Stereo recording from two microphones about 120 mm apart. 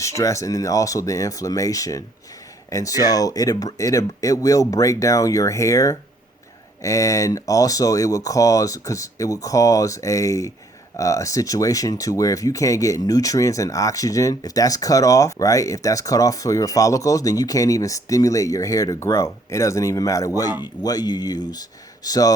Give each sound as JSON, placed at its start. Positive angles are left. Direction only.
{"t": 0.0, "sound": "speech", "side_deg": 25}